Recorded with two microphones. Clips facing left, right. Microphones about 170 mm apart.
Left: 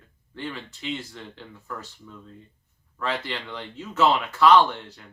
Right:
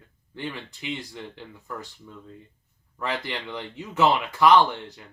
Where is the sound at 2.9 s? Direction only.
15° right (ahead or behind).